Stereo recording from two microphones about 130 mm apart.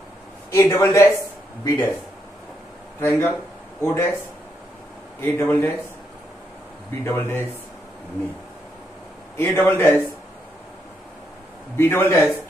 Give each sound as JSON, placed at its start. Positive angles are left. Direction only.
{"t": 0.5, "sound": "speech", "side_deg": 20}
{"t": 3.0, "sound": "a man's voice", "side_deg": 15}
{"t": 5.2, "sound": "a man's voice", "side_deg": 15}
{"t": 7.1, "sound": "a man's voice", "side_deg": 20}
{"t": 9.4, "sound": "a man's voice", "side_deg": 20}
{"t": 11.7, "sound": "a man's voice", "side_deg": 20}